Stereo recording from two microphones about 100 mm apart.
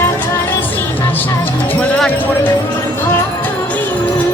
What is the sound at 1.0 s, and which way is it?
Music, 20° left (ahead or behind).